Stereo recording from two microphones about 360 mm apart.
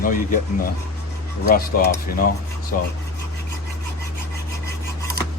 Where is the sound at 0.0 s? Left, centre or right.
Left.